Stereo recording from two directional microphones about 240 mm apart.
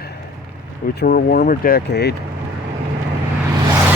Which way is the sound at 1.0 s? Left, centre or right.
Left.